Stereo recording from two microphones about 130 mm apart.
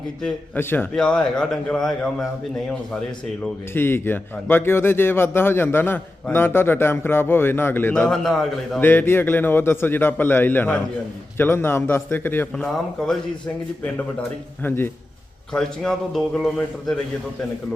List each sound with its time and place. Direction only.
0.2 s a man's voice: 5° left (ahead or behind)
0.6 s a man's voice: 15° left (ahead or behind)
0.9 s a man's voice: 5° left (ahead or behind)
3.8 s a man's voice: 15° left (ahead or behind)
8.1 s a man's voice: 5° left (ahead or behind)
8.8 s a man's voice: 15° left (ahead or behind)
13.8 s a man's voice: 15° left (ahead or behind)
15.5 s a man's voice: 5° left (ahead or behind)